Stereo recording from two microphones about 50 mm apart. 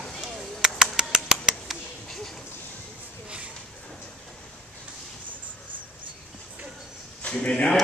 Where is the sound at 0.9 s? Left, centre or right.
Centre.